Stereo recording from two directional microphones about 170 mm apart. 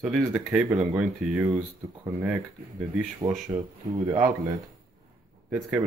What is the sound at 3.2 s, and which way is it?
Speech, 20° right (ahead or behind).